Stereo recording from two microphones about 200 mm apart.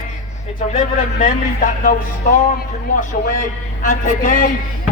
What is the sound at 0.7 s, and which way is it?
A man's voice, 40° left (ahead or behind).